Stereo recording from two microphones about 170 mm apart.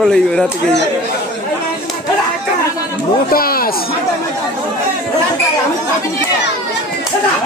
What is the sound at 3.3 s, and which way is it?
Speech, 60° left (ahead or behind).